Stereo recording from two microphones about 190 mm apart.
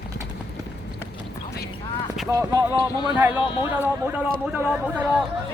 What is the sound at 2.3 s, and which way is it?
Speech, 15° right (ahead or behind).